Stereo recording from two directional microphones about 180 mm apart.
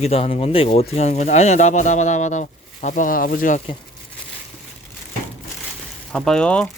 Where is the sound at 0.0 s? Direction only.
35° left (ahead or behind); by 3.6 s 50° left (ahead or behind).